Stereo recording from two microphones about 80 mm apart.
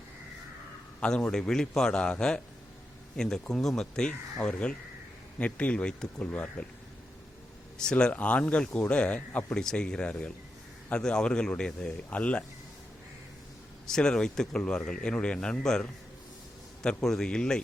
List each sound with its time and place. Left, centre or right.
1.0 s speech: centre
7.8 s speech: centre
13.8 s speech: centre